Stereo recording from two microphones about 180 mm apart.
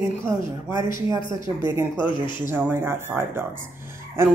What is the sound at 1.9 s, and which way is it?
Speech, 25° left (ahead or behind).